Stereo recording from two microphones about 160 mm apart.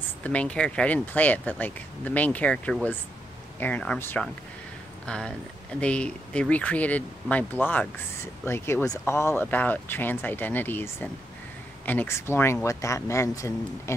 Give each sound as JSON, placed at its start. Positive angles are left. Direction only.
{"t": 0.2, "sound": "speech", "side_deg": 10}